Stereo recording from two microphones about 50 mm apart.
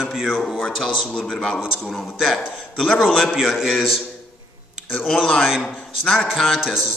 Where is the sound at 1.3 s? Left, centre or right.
Centre.